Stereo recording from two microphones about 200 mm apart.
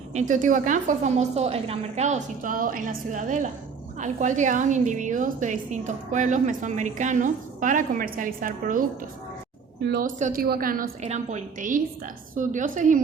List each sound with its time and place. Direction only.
0.1 s a woman's voice: 35° right (ahead or behind); by 10.1 s 50° right (ahead or behind)
10.2 s a woman's voice: 40° right (ahead or behind)